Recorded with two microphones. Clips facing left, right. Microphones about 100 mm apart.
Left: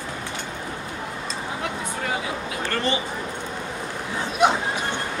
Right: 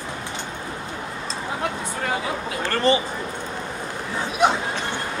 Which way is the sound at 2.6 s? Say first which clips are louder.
Right 4 dB; 35° right (ahead or behind).